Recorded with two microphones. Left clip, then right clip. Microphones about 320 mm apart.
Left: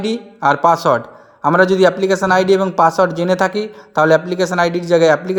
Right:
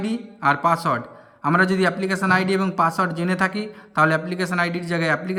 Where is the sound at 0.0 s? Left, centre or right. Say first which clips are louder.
Left 6 dB; centre.